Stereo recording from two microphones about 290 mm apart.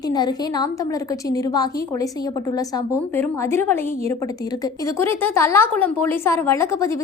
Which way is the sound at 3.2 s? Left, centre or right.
Centre.